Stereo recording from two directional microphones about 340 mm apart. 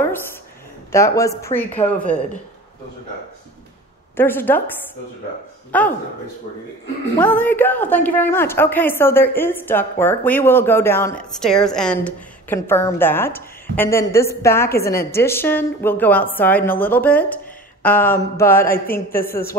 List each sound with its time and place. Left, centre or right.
0.9 s a woman's voice: centre
4.2 s a woman's voice: centre
5.7 s a woman's voice: centre
7.2 s a woman's voice: centre
19.1 s a woman's voice: left